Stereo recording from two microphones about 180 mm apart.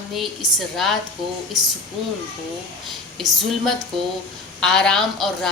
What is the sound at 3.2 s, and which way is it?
A woman's voice, centre (ahead or behind).